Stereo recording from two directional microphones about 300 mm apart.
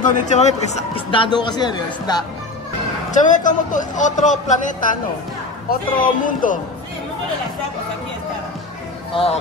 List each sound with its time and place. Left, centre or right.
0.0 s a man's voice: left
3.1 s a man's voice: left
9.1 s a man's voice: centre